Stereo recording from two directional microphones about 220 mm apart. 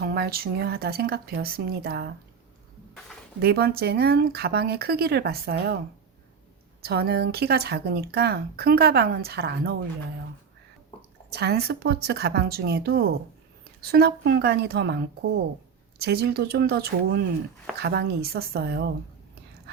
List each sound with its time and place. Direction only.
0.0 s speech: 45° right (ahead or behind)
3.4 s speech: 45° right (ahead or behind)
6.8 s speech: 45° right (ahead or behind)
11.3 s speech: 50° right (ahead or behind)
16.0 s speech: 45° right (ahead or behind)